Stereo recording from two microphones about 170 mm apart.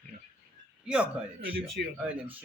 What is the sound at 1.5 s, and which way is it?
Speech, 65° right (ahead or behind).